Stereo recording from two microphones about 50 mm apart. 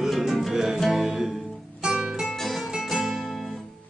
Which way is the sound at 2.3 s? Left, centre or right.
Centre.